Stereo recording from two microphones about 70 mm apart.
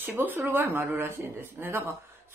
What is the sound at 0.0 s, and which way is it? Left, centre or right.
Speech, right.